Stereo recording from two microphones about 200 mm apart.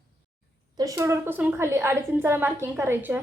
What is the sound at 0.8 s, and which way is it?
A woman's voice, 15° right (ahead or behind).